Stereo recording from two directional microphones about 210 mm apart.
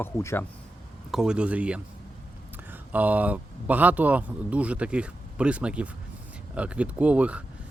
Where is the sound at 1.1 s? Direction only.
5° right (ahead or behind).